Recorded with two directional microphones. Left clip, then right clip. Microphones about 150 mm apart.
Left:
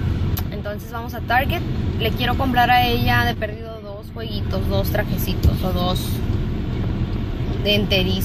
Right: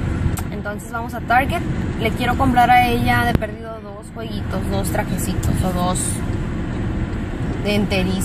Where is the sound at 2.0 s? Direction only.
10° right (ahead or behind).